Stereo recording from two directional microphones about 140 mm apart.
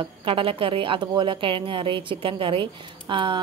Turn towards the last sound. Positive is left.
turn(degrees=-35)  # may be behind; listen again after turning